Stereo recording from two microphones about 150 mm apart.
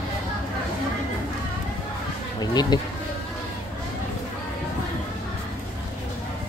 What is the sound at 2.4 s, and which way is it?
Bee, 25° left (ahead or behind).